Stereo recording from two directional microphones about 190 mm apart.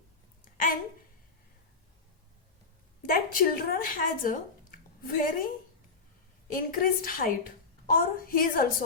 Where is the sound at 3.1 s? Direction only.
50° left (ahead or behind).